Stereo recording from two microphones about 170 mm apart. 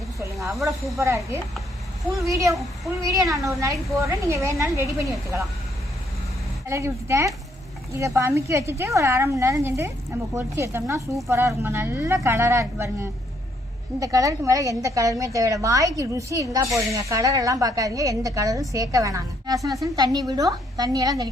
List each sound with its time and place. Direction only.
0.9 s speech: 20° right (ahead or behind)
6.7 s speech: 15° right (ahead or behind)